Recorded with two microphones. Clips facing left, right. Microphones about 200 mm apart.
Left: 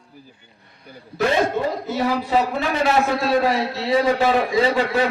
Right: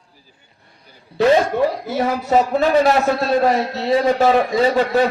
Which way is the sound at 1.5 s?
50° right (ahead or behind).